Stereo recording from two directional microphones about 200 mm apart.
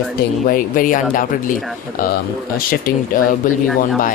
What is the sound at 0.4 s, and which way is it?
Speech, 45° left (ahead or behind).